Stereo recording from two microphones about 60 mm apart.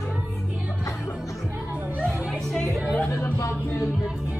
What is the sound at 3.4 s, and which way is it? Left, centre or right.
Music, left.